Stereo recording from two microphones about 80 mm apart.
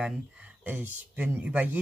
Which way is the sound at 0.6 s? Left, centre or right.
Centre.